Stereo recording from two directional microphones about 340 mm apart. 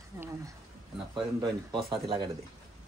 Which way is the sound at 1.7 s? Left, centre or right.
Centre.